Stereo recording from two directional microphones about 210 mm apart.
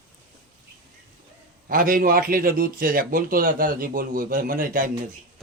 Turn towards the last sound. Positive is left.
turn(degrees=-40)  # may be behind; listen again after turning